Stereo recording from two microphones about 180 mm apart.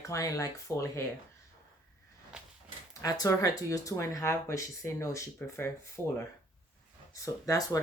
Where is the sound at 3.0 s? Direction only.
20° left (ahead or behind).